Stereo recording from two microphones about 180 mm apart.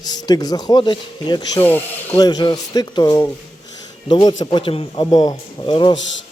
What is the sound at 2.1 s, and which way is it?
Speech, 20° left (ahead or behind).